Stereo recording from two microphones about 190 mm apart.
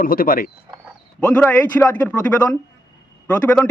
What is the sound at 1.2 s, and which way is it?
Speech, 10° left (ahead or behind).